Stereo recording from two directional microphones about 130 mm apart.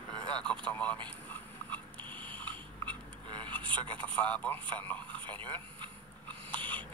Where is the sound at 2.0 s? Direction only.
40° right (ahead or behind).